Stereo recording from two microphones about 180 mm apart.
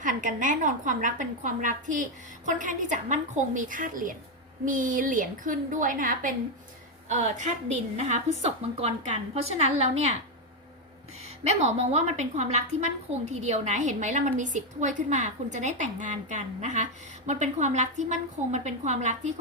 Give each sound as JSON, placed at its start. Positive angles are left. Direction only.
{"t": 0.0, "sound": "a woman's voice", "side_deg": -45}
{"t": 11.4, "sound": "a woman's voice", "side_deg": -35}